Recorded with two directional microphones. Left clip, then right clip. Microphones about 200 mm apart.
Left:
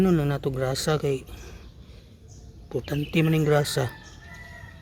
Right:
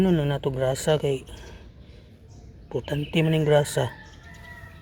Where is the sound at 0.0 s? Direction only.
15° left (ahead or behind).